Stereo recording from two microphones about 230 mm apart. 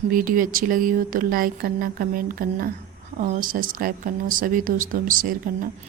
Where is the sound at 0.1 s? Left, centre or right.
Right.